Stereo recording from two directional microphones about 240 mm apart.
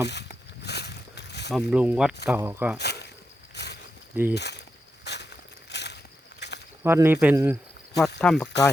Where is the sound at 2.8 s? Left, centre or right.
Left.